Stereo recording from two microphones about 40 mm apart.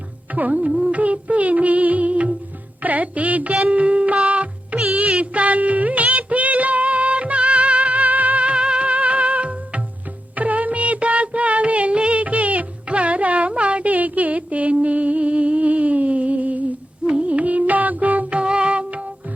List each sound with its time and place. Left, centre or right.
0.3 s music: right
4.9 s music of bollywood: right
8.5 s music: right